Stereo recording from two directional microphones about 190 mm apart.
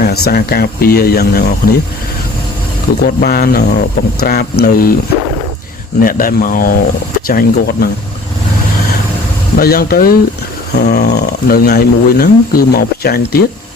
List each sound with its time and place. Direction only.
0.0 s speech: 55° left (ahead or behind)
3.0 s speech: 55° left (ahead or behind)
6.0 s speech: 50° left (ahead or behind)
9.6 s speech: 50° left (ahead or behind)